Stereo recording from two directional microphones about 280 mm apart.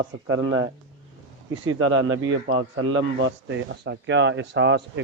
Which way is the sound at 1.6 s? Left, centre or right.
Right.